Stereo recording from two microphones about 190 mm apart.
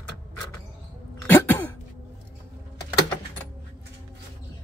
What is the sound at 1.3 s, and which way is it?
Cough, 10° left (ahead or behind).